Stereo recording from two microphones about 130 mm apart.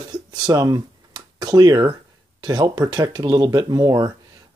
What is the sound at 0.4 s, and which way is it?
Speech, 35° right (ahead or behind).